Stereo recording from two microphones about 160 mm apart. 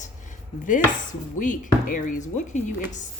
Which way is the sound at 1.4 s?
55° left (ahead or behind).